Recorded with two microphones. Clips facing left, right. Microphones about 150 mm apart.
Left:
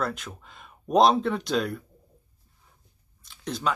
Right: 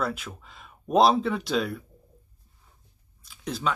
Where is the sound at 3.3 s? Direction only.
5° right (ahead or behind).